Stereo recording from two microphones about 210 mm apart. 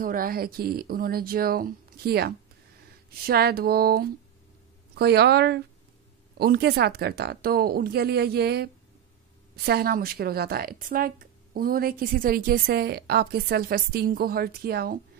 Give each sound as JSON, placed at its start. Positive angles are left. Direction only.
{"t": 0.0, "sound": "a woman's voice", "side_deg": -45}
{"t": 9.7, "sound": "a woman's voice", "side_deg": -45}